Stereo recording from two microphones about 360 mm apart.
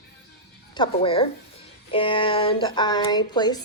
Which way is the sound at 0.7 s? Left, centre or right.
Centre.